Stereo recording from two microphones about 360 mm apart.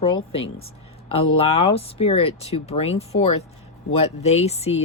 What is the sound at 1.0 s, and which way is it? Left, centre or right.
Speech, centre.